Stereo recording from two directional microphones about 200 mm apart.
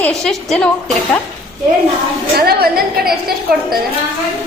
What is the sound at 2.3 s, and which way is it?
Speech, 50° right (ahead or behind).